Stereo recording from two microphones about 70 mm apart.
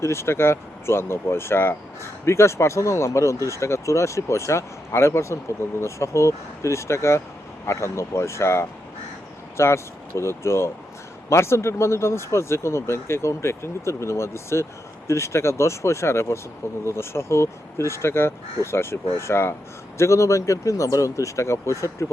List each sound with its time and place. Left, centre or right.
0.0 s speech: left
20.0 s speech: left